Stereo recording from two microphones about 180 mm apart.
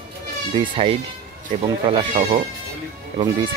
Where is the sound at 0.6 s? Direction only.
30° right (ahead or behind).